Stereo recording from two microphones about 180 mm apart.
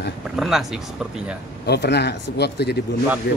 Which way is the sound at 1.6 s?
70° left (ahead or behind).